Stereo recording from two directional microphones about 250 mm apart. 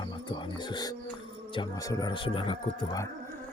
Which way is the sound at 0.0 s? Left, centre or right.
Centre.